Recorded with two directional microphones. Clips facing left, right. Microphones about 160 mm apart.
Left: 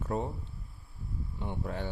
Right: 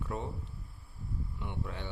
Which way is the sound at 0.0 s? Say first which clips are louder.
Left 5 dB; 40° left (ahead or behind).